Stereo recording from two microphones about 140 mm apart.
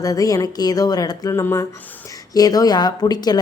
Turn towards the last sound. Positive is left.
turn(degrees=30)  # may be behind; listen again after turning